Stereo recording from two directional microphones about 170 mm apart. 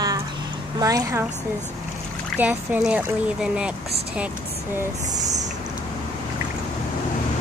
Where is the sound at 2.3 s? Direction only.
10° right (ahead or behind).